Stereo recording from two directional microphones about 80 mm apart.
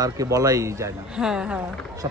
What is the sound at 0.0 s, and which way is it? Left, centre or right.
Speech, right.